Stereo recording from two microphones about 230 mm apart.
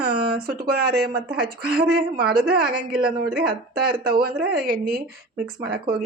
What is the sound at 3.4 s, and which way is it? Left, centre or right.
Speech, right.